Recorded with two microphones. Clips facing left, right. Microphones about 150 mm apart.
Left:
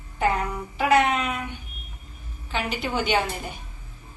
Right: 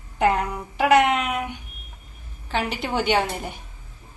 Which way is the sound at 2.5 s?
70° right (ahead or behind).